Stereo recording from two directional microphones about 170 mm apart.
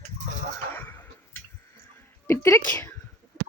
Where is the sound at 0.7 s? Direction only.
10° left (ahead or behind).